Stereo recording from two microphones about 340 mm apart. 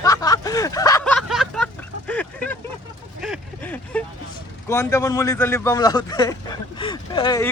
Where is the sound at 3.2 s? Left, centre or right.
Centre.